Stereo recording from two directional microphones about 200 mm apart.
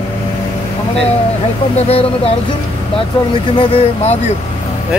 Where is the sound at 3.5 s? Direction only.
30° left (ahead or behind).